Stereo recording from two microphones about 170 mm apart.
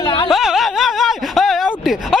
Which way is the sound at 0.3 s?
Centre (ahead or behind).